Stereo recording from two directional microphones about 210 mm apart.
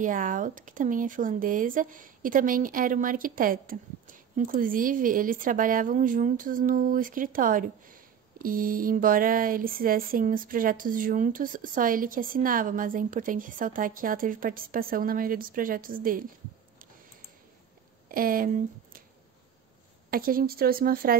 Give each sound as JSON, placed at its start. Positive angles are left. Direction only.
{"t": 0.0, "sound": "speech", "side_deg": -40}
{"t": 18.0, "sound": "speech", "side_deg": -45}
{"t": 20.1, "sound": "a woman's voice", "side_deg": -45}